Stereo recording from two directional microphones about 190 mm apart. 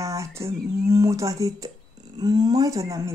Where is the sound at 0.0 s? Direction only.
15° right (ahead or behind).